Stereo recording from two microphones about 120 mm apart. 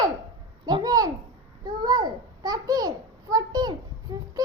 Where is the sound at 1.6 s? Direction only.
35° right (ahead or behind).